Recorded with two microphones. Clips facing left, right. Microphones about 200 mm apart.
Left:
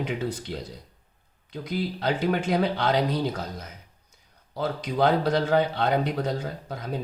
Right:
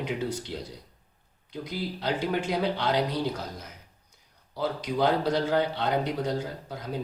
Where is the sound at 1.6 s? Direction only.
55° left (ahead or behind).